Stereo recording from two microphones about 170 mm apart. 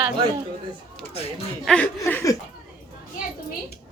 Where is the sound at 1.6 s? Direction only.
5° left (ahead or behind).